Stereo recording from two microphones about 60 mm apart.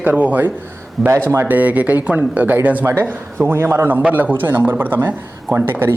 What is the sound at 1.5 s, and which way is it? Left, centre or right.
Speech, right.